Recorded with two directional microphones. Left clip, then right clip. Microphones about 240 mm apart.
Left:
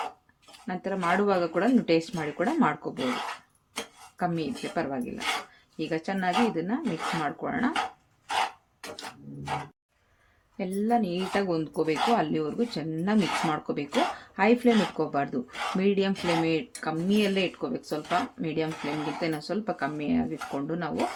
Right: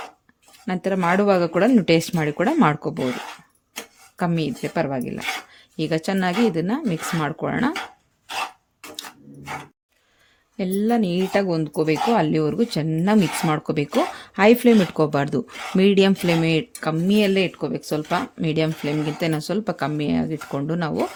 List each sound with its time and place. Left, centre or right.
0.7 s speech: right
4.2 s speech: right
10.6 s speech: right
11.4 s speech: right